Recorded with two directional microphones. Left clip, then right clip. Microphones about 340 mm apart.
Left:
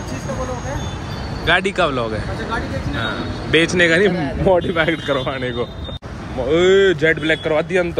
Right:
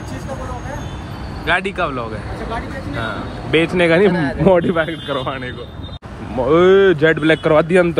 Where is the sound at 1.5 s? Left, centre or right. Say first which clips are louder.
Left 2 dB; centre.